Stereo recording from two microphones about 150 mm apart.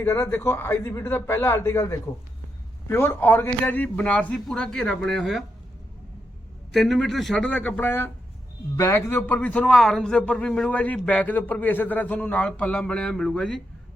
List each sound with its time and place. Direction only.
0.0 s a man's voice: 15° left (ahead or behind)
6.7 s a man's voice: centre (ahead or behind)